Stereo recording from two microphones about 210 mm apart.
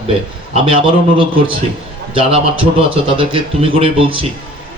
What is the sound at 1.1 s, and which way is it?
Speech, 25° right (ahead or behind).